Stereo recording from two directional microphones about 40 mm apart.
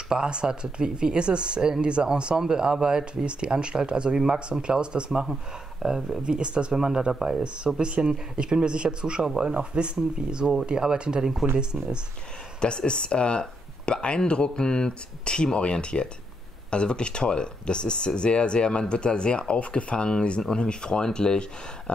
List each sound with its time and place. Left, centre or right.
0.1 s speech: right
5.2 s speech: centre
5.9 s speech: centre
10.4 s speech: centre
12.5 s speech: left